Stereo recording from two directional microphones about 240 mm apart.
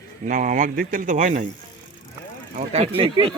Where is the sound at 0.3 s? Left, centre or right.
Right.